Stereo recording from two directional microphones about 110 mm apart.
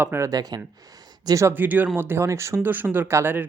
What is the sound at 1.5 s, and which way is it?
Speech, 15° right (ahead or behind).